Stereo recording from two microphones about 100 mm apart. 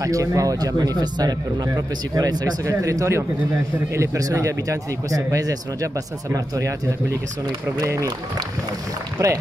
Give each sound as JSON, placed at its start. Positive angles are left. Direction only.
{"t": 0.0, "sound": "speech", "side_deg": -35}
{"t": 7.8, "sound": "speech", "side_deg": -30}
{"t": 9.2, "sound": "speech", "side_deg": -35}